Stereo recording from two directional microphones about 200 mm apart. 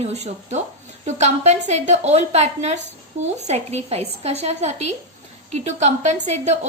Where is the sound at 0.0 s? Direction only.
35° right (ahead or behind).